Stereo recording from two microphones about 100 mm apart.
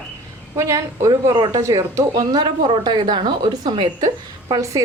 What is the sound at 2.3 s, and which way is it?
A woman's voice, 50° right (ahead or behind).